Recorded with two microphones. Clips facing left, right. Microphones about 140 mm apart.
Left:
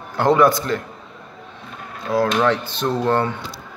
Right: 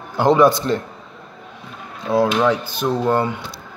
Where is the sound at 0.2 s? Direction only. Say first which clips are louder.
Right 1 dB; 20° right (ahead or behind).